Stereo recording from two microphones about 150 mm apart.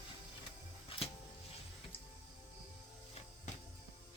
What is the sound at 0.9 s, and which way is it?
Music, 40° left (ahead or behind).